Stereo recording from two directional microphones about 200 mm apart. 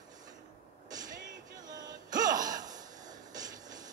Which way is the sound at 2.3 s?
40° right (ahead or behind).